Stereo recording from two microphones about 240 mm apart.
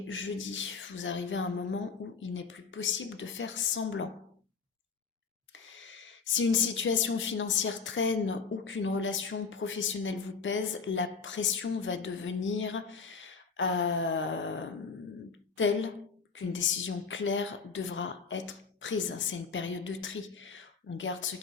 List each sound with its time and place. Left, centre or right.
0.1 s a woman's voice: left
6.3 s a woman's voice: left
15.5 s a woman's voice: left